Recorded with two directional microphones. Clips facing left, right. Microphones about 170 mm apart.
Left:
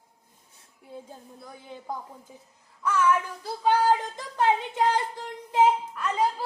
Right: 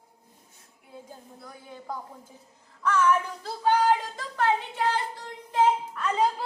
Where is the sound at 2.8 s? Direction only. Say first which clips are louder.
Even; 10° left (ahead or behind).